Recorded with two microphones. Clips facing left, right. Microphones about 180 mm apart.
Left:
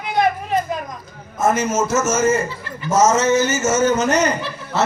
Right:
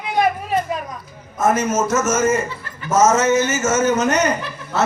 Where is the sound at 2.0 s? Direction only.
30° left (ahead or behind).